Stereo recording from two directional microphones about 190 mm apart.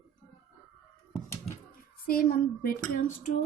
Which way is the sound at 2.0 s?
50° left (ahead or behind).